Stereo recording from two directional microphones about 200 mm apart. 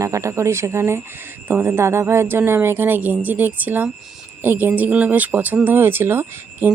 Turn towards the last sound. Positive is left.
turn(degrees=-10)  # may be behind; listen again after turning